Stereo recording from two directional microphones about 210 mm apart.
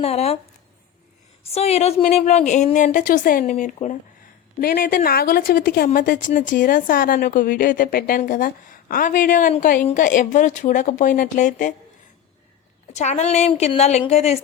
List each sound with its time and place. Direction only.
0.0 s speech: 30° left (ahead or behind)
1.5 s a woman's voice: 30° left (ahead or behind)
4.6 s a woman's voice: 45° left (ahead or behind)
12.9 s a woman's voice: 35° left (ahead or behind)